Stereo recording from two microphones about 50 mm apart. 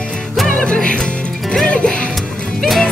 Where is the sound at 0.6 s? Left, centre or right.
Centre.